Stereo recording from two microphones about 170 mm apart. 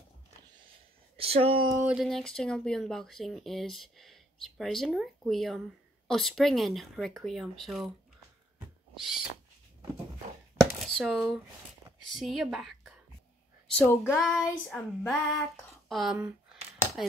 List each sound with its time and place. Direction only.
1.1 s speech: 35° right (ahead or behind)
1.9 s speech: centre (ahead or behind)
10.6 s a sound: 5° left (ahead or behind)
12.2 s speech: centre (ahead or behind)
13.7 s speech: 10° left (ahead or behind)
15.5 s a sound: centre (ahead or behind)